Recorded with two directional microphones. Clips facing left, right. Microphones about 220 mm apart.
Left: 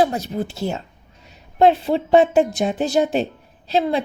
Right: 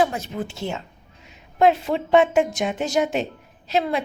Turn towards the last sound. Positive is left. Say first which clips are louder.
# left 3 dB
turn(degrees=30)  # may be behind; listen again after turning